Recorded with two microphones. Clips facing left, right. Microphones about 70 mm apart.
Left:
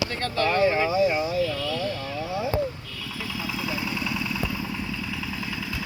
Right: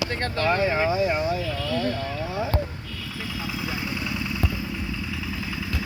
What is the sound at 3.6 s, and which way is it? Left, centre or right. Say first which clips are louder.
Vehicle: left 1 dB; right.